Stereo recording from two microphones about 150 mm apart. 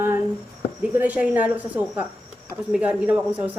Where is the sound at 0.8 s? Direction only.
10° right (ahead or behind).